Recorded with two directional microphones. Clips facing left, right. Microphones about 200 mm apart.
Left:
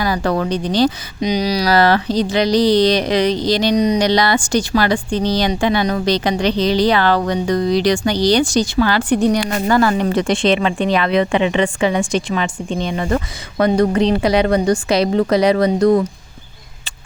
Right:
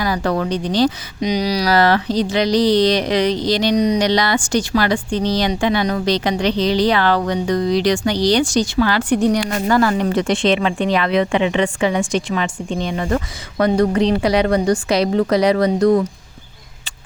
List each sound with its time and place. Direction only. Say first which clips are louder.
0.0 s speech: left 1 dB; 35° left (ahead or behind)